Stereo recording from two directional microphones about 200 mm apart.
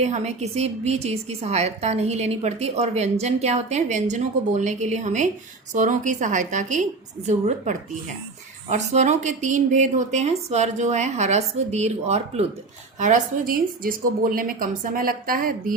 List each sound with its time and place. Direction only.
0.0 s a woman's voice: 35° right (ahead or behind)